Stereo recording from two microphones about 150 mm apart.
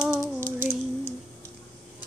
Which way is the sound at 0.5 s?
15° right (ahead or behind).